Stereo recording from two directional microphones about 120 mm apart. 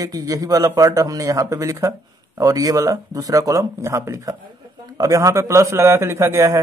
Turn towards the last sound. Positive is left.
turn(degrees=-20)  # may be behind; listen again after turning